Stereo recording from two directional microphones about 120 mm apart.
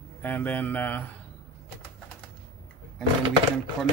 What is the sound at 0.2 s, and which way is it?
Speech, 15° left (ahead or behind).